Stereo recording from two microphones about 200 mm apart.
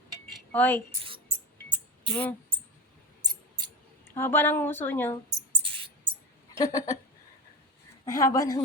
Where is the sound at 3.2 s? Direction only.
20° right (ahead or behind).